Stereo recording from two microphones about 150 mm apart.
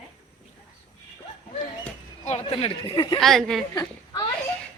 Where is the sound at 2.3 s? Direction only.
45° left (ahead or behind).